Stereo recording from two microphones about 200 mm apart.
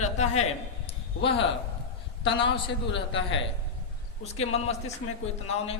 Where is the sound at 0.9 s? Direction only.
25° left (ahead or behind).